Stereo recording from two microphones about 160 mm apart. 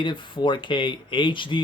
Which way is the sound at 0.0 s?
30° left (ahead or behind).